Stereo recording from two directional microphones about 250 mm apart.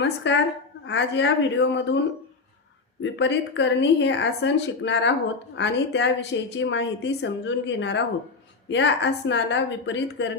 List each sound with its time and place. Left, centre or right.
0.0 s a woman's voice: left
3.0 s a woman's voice: left